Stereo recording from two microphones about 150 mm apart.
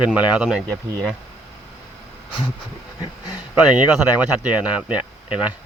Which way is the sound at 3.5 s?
5° right (ahead or behind).